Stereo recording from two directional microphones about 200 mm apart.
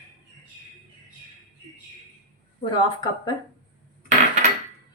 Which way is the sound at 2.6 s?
20° left (ahead or behind).